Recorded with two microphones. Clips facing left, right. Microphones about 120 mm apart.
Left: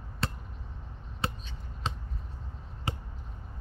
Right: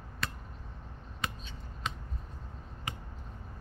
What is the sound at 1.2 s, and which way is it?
Basketball bounce, 30° left (ahead or behind).